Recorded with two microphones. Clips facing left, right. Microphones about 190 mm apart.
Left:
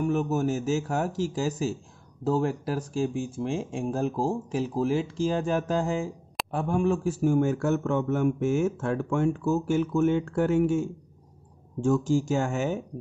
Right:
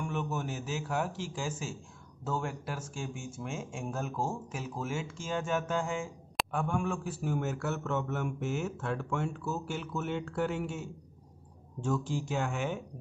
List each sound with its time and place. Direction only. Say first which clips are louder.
0.0 s a man's voice: left 10 dB; 40° left (ahead or behind)